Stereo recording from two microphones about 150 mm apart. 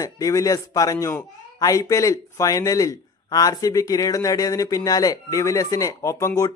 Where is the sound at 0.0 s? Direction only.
20° left (ahead or behind).